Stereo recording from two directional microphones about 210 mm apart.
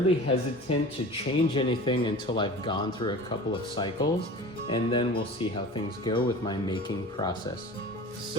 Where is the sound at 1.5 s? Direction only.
25° left (ahead or behind).